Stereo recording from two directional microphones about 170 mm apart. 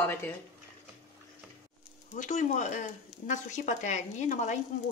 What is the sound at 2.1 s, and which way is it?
A woman's voice, 45° left (ahead or behind).